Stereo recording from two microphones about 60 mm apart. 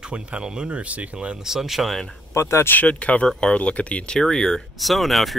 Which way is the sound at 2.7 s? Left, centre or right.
Left.